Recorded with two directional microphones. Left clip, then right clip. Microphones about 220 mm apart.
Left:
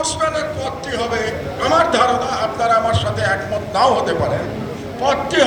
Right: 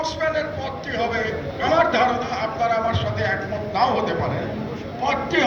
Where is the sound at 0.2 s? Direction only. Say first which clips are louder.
Left 4 dB; 55° left (ahead or behind).